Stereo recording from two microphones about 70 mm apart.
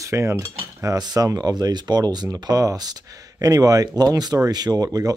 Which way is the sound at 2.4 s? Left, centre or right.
Right.